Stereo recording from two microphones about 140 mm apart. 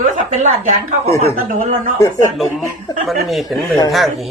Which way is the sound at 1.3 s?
75° right (ahead or behind).